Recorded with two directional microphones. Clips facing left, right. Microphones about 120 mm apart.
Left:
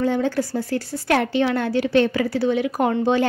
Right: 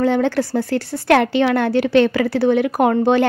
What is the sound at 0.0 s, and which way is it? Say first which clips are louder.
A woman's voice: right 4 dB; 75° right (ahead or behind).